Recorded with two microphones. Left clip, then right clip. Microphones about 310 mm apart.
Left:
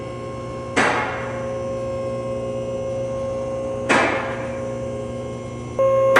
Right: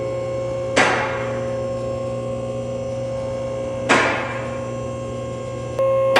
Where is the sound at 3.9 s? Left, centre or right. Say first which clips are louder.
Right 1 dB; centre.